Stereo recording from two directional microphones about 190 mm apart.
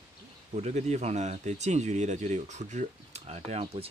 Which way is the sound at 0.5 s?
35° right (ahead or behind).